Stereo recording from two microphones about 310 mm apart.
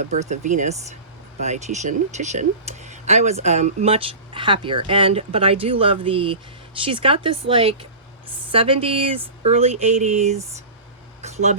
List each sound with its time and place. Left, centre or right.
0.2 s speech: right